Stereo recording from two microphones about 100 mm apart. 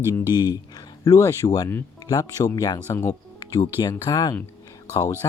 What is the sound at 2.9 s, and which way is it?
Speech, 25° left (ahead or behind).